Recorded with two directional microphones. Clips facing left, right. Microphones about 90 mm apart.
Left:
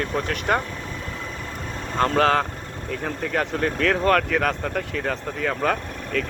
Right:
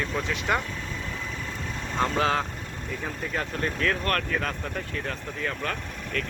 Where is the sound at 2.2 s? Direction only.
70° left (ahead or behind).